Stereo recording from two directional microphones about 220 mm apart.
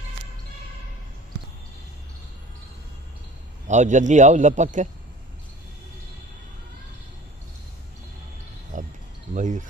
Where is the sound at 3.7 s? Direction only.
35° right (ahead or behind).